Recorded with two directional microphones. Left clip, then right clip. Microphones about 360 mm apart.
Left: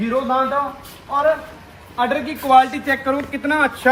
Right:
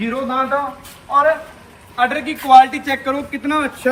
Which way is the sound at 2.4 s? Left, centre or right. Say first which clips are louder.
Right 5 dB; centre.